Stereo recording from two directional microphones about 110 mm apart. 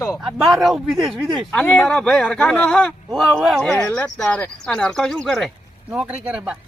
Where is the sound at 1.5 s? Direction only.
10° left (ahead or behind).